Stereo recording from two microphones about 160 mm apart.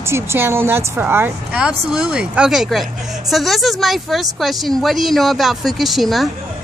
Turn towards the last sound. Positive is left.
turn(degrees=0)  # may be behind; listen again after turning